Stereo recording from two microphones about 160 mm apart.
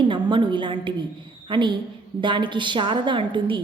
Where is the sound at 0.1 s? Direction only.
30° right (ahead or behind).